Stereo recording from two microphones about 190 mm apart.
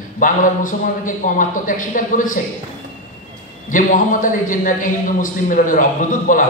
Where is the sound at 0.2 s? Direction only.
45° left (ahead or behind).